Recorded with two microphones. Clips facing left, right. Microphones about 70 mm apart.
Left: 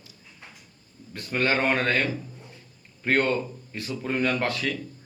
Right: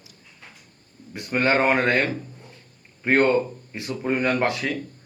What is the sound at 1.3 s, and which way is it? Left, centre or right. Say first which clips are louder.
Speech: right 4 dB; centre.